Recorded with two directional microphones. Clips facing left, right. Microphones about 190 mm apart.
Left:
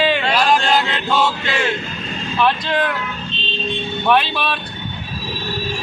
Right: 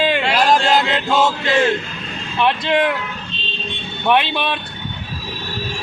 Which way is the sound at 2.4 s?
20° right (ahead or behind).